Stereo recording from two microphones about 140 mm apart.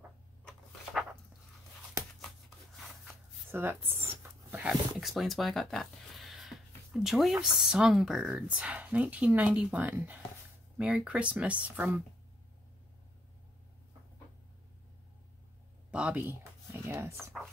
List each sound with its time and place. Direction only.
2.0 s a sound: 20° right (ahead or behind)
3.5 s speech: 15° right (ahead or behind)
15.9 s speech: 10° right (ahead or behind)